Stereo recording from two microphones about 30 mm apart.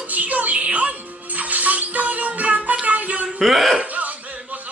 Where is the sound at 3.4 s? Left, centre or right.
Centre.